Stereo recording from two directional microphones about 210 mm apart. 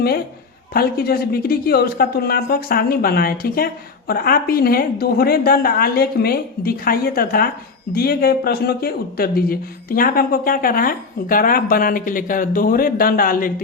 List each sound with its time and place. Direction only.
0.7 s speech: 45° left (ahead or behind)